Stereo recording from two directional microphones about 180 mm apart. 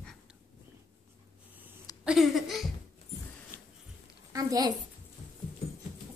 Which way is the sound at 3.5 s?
10° left (ahead or behind).